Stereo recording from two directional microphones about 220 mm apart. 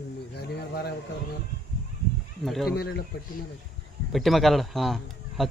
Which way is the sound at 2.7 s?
45° left (ahead or behind).